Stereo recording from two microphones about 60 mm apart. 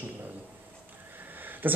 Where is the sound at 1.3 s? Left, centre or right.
Right.